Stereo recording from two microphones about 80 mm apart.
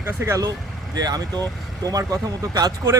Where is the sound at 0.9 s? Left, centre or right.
Right.